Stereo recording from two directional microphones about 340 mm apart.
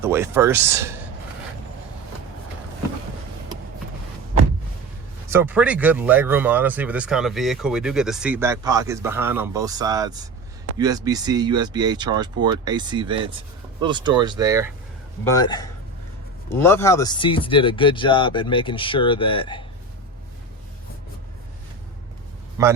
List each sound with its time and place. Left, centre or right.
0.0 s speech: centre
5.3 s speech: centre
15.2 s speech: centre